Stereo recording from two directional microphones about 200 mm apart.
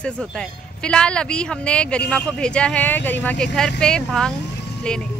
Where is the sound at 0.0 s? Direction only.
5° left (ahead or behind).